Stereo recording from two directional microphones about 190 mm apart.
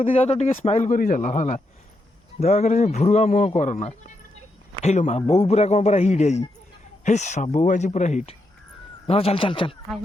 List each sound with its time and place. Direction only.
0.0 s a man's voice: 30° left (ahead or behind)